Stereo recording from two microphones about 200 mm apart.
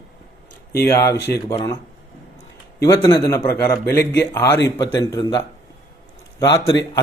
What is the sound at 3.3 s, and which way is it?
Speech, 15° left (ahead or behind).